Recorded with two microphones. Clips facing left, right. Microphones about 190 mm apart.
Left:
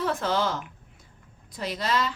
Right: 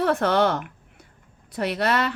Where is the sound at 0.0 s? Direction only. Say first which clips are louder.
Right 6 dB; 65° right (ahead or behind).